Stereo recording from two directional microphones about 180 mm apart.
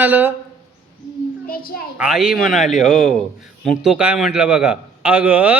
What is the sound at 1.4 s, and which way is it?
Speech, 55° left (ahead or behind).